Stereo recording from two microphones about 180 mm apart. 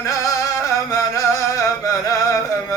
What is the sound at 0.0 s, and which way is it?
Music, 15° left (ahead or behind).